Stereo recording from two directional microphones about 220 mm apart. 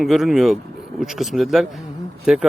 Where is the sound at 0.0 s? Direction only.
Centre (ahead or behind).